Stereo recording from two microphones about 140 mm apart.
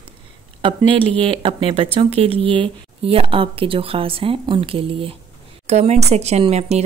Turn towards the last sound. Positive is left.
turn(degrees=-50)  # may be behind; listen again after turning